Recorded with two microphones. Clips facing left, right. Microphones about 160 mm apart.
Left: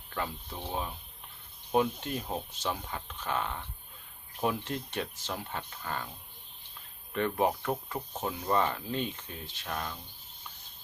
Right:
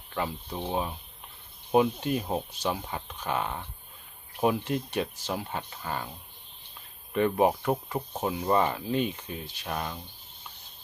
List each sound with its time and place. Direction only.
0.1 s speech: 20° right (ahead or behind)
7.1 s speech: 15° right (ahead or behind)